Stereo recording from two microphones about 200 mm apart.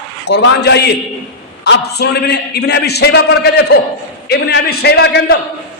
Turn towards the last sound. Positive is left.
turn(degrees=55)  # may be behind; listen again after turning